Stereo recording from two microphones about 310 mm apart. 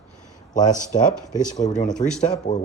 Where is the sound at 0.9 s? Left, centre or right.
Left.